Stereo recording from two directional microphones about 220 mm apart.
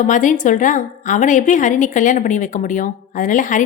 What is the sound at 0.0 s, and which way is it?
A woman's voice, 35° left (ahead or behind).